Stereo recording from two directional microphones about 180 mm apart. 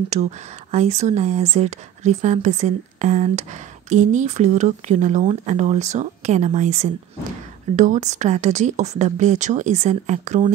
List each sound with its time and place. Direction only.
0.1 s speech: 40° right (ahead or behind)